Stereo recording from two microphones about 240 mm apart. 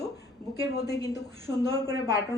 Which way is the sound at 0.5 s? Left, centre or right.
Centre.